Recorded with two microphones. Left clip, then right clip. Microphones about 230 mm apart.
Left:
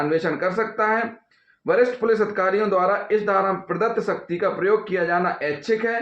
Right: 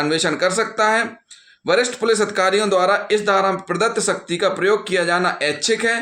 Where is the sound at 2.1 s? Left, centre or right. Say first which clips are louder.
Right 3 dB; right.